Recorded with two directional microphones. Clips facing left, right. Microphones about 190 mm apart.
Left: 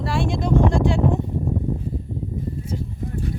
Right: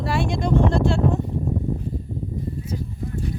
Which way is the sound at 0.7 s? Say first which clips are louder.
Even; 15° left (ahead or behind).